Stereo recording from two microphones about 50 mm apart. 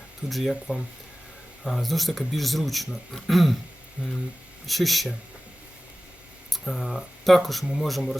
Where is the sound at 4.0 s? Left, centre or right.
Right.